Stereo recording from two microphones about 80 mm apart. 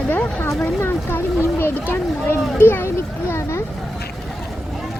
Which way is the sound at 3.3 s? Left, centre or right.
Left.